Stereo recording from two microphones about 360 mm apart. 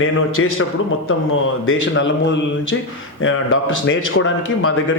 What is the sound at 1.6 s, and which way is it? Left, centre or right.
Speech, left.